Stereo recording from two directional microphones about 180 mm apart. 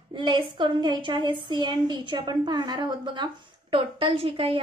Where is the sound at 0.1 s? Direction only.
25° right (ahead or behind).